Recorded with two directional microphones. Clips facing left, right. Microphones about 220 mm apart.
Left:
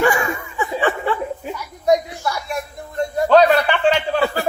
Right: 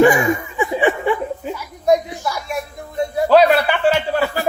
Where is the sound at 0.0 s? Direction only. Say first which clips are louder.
Right 6 dB; 15° right (ahead or behind).